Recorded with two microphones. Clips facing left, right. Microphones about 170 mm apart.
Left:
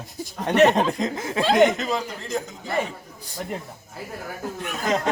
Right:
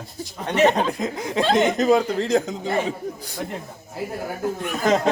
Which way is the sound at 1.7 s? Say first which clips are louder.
Right 9 dB; 40° right (ahead or behind).